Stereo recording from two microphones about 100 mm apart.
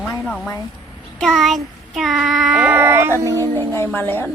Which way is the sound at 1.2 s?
Centre (ahead or behind).